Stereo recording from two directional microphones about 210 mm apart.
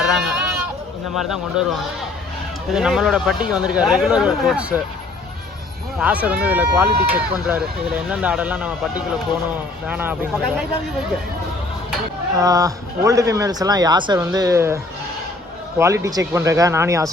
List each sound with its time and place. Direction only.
0.1 s speech: centre (ahead or behind)
2.7 s speech: 5° right (ahead or behind)
6.0 s speech: 5° right (ahead or behind)
9.8 s speech: 5° right (ahead or behind)
12.4 s speech: 15° right (ahead or behind)
15.8 s speech: 15° right (ahead or behind)